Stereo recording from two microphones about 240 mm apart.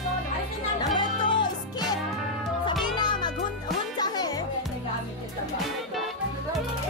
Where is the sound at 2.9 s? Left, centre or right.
Centre.